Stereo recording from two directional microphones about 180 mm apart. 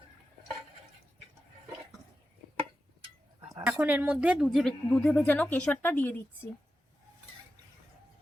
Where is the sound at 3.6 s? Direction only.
10° right (ahead or behind); by 6.1 s 10° left (ahead or behind).